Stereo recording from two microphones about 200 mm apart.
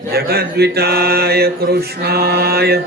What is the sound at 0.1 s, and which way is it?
Mantra, 50° right (ahead or behind).